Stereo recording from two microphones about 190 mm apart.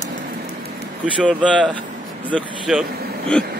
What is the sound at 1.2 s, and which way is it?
Speech, 5° left (ahead or behind).